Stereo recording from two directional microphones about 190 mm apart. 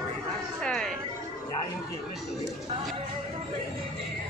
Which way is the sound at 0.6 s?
5° left (ahead or behind).